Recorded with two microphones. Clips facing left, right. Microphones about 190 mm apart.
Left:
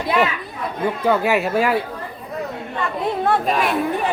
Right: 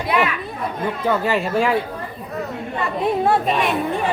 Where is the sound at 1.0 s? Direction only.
10° left (ahead or behind).